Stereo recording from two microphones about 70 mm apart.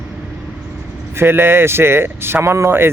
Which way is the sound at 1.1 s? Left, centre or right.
Right.